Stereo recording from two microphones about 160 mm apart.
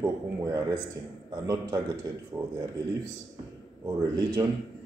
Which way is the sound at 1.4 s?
20° right (ahead or behind).